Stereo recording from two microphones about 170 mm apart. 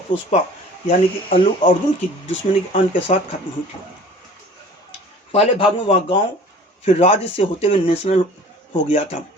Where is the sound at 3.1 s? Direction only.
45° left (ahead or behind).